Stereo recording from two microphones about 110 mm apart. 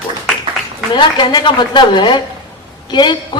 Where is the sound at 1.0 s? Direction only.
45° left (ahead or behind).